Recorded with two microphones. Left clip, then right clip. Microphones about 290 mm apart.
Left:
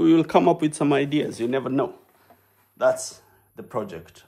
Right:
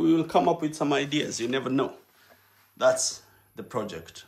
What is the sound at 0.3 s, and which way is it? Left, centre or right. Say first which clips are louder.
Speech: left 4 dB; left.